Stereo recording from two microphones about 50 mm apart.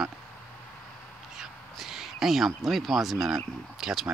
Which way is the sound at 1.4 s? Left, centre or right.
Centre.